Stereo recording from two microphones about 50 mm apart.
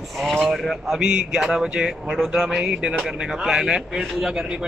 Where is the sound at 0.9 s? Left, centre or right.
Centre.